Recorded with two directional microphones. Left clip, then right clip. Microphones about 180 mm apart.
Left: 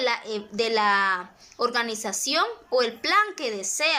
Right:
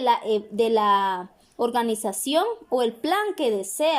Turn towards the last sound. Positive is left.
turn(degrees=-50)  # may be behind; listen again after turning